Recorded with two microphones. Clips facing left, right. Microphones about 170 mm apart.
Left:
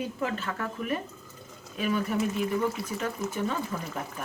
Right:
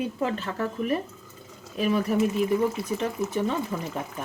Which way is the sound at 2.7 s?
25° right (ahead or behind).